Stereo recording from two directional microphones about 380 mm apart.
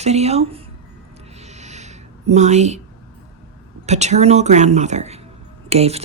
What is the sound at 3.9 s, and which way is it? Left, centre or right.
Speech, centre.